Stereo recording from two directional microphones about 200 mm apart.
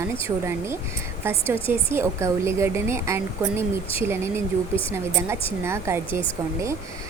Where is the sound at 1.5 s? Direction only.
10° right (ahead or behind).